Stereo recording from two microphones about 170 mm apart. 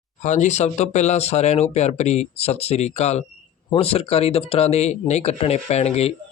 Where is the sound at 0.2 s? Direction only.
45° left (ahead or behind).